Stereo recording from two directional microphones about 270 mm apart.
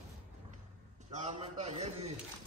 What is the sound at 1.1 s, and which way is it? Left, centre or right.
A man's voice, right.